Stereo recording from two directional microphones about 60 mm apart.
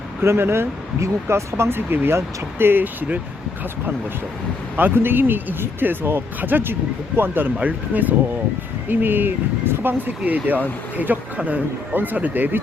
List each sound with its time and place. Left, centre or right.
0.2 s speech: right
4.8 s speech: right
10.2 s speech: right